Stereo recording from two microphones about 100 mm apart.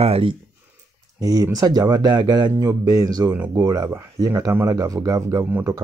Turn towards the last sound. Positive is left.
turn(degrees=-35)  # may be behind; listen again after turning